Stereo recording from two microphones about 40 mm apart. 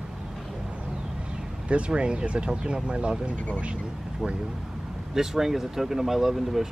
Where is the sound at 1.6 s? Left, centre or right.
Right.